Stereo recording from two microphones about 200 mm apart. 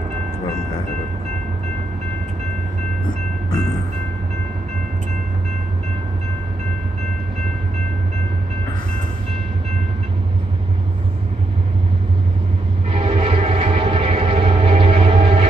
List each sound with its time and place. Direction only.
12.9 s music: 30° right (ahead or behind)